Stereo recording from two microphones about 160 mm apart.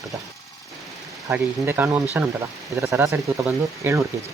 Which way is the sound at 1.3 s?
10° right (ahead or behind).